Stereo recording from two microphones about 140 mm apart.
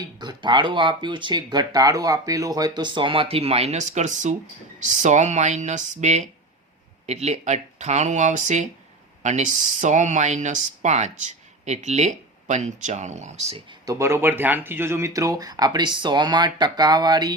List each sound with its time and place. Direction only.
0.2 s speech: 35° right (ahead or behind); by 13.6 s 50° right (ahead or behind)
13.7 s speech: 25° right (ahead or behind)